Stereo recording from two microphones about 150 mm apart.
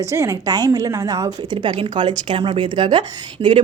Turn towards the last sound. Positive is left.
turn(degrees=-30)  # may be behind; listen again after turning